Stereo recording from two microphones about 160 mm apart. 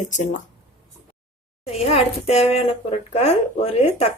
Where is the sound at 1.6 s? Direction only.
40° left (ahead or behind).